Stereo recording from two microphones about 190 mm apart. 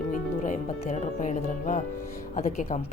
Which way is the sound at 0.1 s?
40° left (ahead or behind).